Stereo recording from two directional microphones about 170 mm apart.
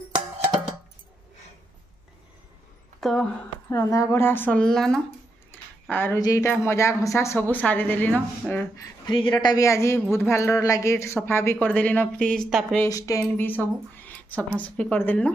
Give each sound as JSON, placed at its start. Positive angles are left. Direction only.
{"t": 3.0, "sound": "speech", "side_deg": 0}
{"t": 3.7, "sound": "a woman's voice", "side_deg": 20}
{"t": 9.0, "sound": "a woman's voice", "side_deg": 30}
{"t": 12.8, "sound": "a woman's voice", "side_deg": 20}